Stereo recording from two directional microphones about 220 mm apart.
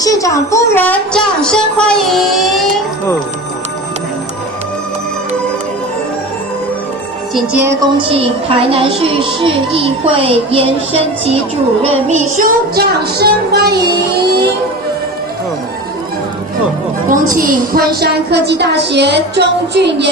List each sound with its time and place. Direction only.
0.0 s speech: 15° left (ahead or behind); by 2.6 s centre (ahead or behind)
7.3 s a woman's voice: 10° right (ahead or behind); by 12.2 s 30° right (ahead or behind)
12.4 s a woman's voice: 40° right (ahead or behind)
17.1 s a woman's voice: 40° right (ahead or behind)